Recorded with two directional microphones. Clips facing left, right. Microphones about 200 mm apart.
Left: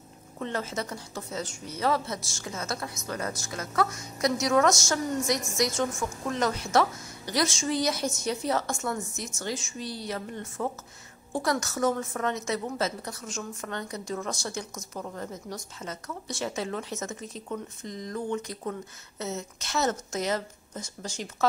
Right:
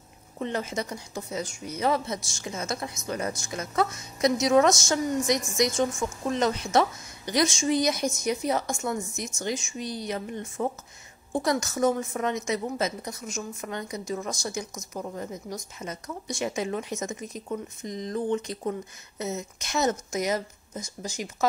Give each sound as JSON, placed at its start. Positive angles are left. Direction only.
{"t": 0.4, "sound": "a woman's voice", "side_deg": -15}